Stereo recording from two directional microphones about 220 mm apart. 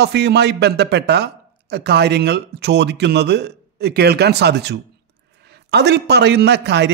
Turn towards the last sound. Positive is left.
turn(degrees=-50)  # may be behind; listen again after turning